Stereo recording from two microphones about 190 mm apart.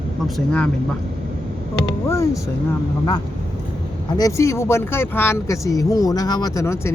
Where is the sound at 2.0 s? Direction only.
15° left (ahead or behind).